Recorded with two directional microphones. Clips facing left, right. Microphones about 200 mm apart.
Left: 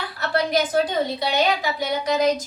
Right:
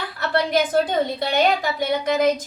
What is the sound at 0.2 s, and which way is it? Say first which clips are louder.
A woman's voice: right 1 dB; 50° right (ahead or behind).